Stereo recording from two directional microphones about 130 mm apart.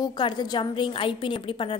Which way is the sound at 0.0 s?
35° left (ahead or behind).